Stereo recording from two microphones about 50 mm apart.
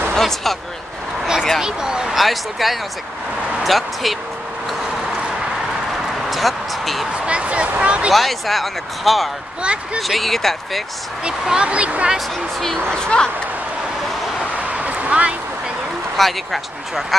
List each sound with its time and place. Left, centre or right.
0.1 s speech: centre
1.6 s speech: centre
2.1 s speech: centre
6.3 s speech: centre
7.2 s speech: right
8.1 s speech: centre
11.2 s speech: centre
12.5 s speech: centre
14.4 s a sound: right
16.2 s speech: centre